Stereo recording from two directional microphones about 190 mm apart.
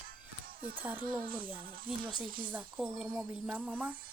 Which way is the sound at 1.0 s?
50° right (ahead or behind).